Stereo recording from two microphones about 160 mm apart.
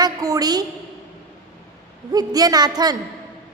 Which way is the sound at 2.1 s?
25° right (ahead or behind).